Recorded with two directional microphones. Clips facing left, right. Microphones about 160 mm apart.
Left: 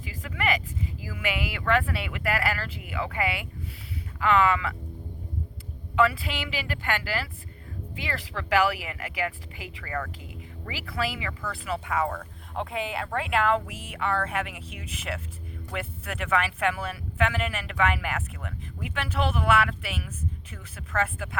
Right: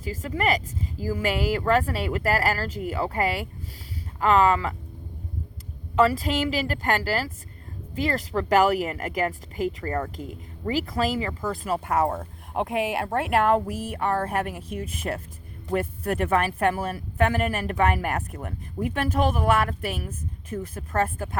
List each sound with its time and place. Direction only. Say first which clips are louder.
0.0 s speech: right 5 dB; 40° right (ahead or behind)
6.0 s speech: right 4 dB; 40° right (ahead or behind)